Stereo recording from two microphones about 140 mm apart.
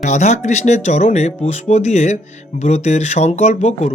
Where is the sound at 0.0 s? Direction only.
55° left (ahead or behind).